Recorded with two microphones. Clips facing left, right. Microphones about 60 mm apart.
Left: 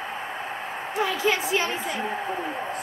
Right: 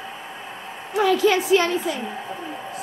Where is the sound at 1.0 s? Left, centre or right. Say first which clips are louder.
Right 8 dB; right.